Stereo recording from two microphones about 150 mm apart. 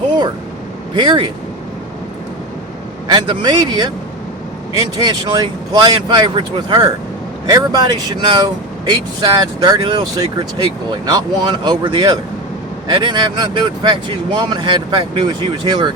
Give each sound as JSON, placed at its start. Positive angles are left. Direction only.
{"t": 0.9, "sound": "speech", "side_deg": -30}
{"t": 3.1, "sound": "speech", "side_deg": -30}